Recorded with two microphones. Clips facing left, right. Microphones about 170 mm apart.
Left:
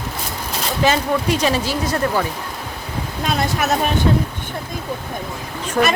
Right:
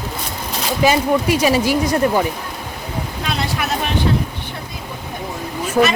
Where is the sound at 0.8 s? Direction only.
10° right (ahead or behind).